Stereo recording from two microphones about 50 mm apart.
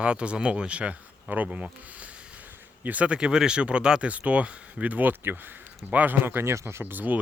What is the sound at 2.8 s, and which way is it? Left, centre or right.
A man's voice, right.